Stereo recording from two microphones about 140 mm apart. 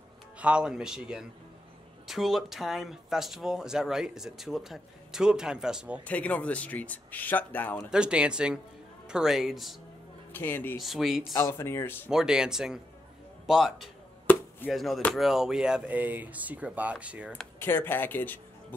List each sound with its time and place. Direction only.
0.4 s speech: 10° right (ahead or behind)
6.0 s speech: 10° left (ahead or behind)
7.9 s speech: 5° right (ahead or behind)
10.3 s speech: 15° left (ahead or behind)
10.8 s speech: centre (ahead or behind)
11.3 s speech: 20° left (ahead or behind)
12.1 s speech: 5° right (ahead or behind)
17.3 s speech: 15° left (ahead or behind)